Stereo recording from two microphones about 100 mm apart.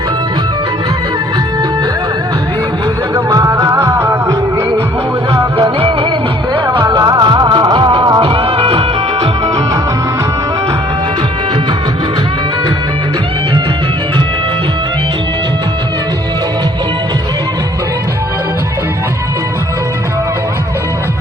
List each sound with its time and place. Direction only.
3.2 s music: 35° right (ahead or behind)
5.8 s music: 60° right (ahead or behind)
6.7 s music: 45° right (ahead or behind); by 8.8 s 70° right (ahead or behind)